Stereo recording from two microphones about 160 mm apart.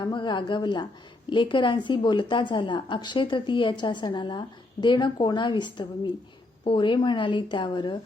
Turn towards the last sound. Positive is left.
turn(degrees=30)  # may be behind; listen again after turning